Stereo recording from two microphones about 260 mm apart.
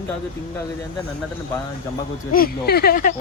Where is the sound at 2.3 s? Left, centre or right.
Left.